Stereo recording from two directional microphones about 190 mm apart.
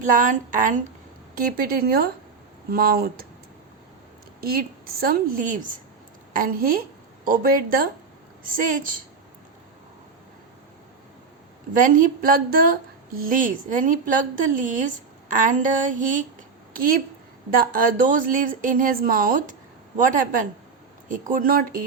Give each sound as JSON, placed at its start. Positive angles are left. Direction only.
{"t": 0.0, "sound": "a woman's voice", "side_deg": -45}
{"t": 4.4, "sound": "a woman's voice", "side_deg": -50}
{"t": 11.8, "sound": "a woman's voice", "side_deg": -45}
{"t": 21.1, "sound": "a woman's voice", "side_deg": -45}